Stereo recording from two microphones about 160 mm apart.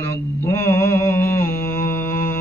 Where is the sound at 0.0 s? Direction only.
15° left (ahead or behind).